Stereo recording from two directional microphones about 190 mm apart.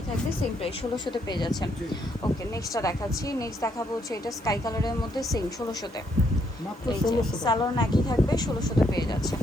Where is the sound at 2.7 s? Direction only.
15° left (ahead or behind).